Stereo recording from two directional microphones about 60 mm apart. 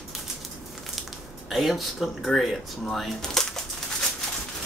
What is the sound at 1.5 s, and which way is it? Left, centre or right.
Speech, centre.